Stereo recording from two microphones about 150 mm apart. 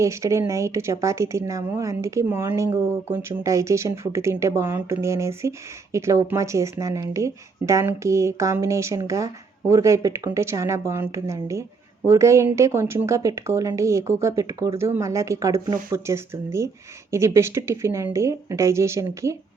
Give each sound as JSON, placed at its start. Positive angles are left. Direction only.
{"t": 0.0, "sound": "speech", "side_deg": -20}